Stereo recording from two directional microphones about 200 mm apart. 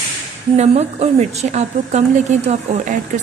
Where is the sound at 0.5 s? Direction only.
35° right (ahead or behind).